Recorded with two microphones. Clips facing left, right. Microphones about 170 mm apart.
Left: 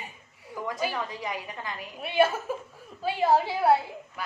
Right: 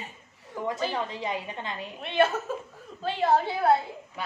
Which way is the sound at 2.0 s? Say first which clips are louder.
Left 1 dB; 10° left (ahead or behind).